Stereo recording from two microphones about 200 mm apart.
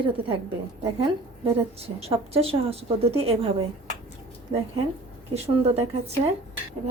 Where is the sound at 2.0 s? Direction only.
30° right (ahead or behind).